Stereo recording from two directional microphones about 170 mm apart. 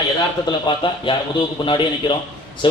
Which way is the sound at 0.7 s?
25° left (ahead or behind).